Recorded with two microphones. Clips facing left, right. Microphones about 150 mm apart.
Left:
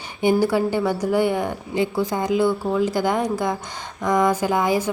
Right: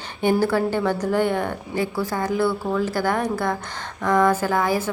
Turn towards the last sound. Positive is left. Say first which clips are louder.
# left 1 dB
turn(degrees=15)  # may be behind; listen again after turning